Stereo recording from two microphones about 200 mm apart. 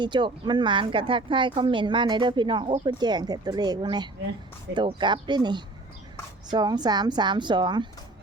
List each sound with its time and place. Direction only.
0.0 s speech: 25° right (ahead or behind)